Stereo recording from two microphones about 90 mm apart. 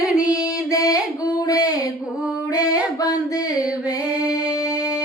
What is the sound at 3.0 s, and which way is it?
Female singing, 45° left (ahead or behind).